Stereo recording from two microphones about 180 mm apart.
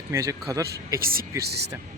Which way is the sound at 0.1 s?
15° right (ahead or behind).